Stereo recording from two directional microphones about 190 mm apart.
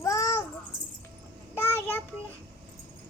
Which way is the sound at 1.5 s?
10° left (ahead or behind).